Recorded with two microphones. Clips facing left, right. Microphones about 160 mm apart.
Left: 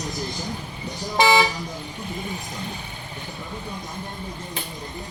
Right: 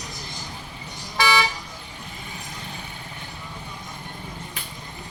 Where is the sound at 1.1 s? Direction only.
20° left (ahead or behind).